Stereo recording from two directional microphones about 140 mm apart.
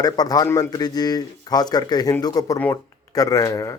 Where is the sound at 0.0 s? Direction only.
30° left (ahead or behind).